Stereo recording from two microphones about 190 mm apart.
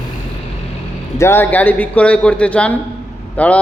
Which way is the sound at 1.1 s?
15° left (ahead or behind).